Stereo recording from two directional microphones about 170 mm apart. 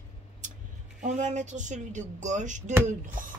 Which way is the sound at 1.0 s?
45° right (ahead or behind).